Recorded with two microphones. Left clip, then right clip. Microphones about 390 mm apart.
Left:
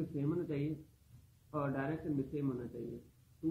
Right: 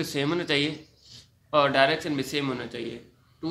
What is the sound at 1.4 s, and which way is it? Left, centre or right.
Speech, right.